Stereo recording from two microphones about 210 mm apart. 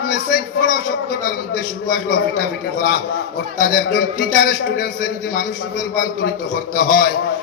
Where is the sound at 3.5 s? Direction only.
45° left (ahead or behind).